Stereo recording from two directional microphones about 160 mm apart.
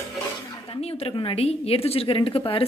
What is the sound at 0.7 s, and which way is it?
A woman's voice, 40° left (ahead or behind).